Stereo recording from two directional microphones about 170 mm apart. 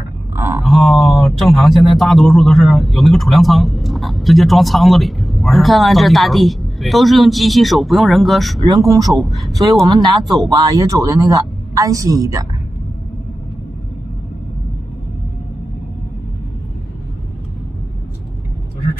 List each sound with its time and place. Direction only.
0.4 s a sound: 15° right (ahead or behind)
0.7 s speech: centre (ahead or behind)
8.6 s a woman's voice: 20° right (ahead or behind)